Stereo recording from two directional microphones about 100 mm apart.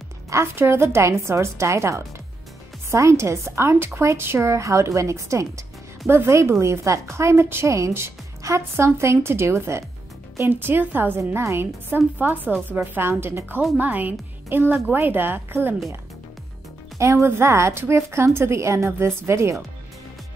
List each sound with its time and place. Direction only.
0.3 s speech: 25° right (ahead or behind)
17.0 s speech: 30° right (ahead or behind)